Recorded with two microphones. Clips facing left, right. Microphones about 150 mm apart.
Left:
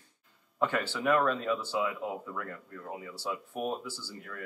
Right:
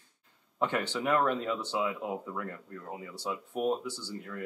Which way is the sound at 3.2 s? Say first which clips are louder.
Right 3 dB; 20° right (ahead or behind).